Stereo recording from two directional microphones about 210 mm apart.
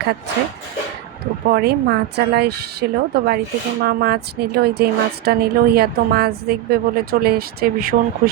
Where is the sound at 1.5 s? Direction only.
50° right (ahead or behind).